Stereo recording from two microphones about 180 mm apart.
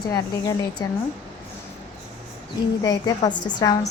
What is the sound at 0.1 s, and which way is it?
Speech, 20° left (ahead or behind).